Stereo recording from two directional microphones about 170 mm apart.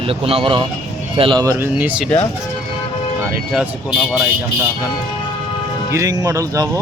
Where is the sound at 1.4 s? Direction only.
15° right (ahead or behind).